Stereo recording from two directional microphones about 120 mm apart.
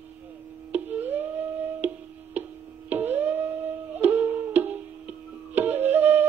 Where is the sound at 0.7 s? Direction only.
15° right (ahead or behind).